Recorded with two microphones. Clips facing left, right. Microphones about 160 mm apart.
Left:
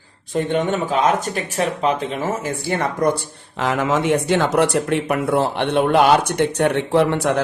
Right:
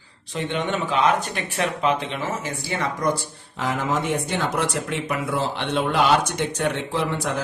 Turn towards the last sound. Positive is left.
turn(degrees=65)  # may be behind; listen again after turning